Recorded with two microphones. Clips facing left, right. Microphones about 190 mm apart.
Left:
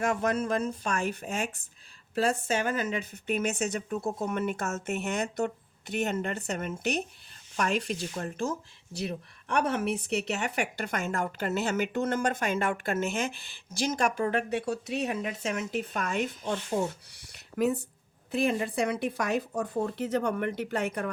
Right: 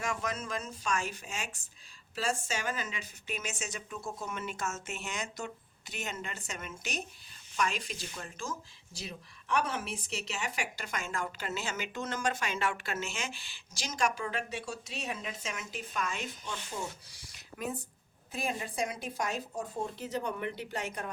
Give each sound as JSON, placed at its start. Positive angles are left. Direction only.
{"t": 0.0, "sound": "speech", "side_deg": 55}